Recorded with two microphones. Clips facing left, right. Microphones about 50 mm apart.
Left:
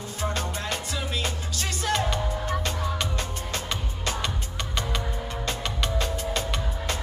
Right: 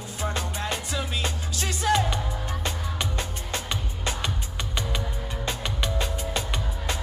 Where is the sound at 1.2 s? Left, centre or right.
Right.